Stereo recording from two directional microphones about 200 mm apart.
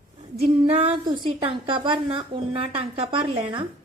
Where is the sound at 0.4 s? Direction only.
30° right (ahead or behind).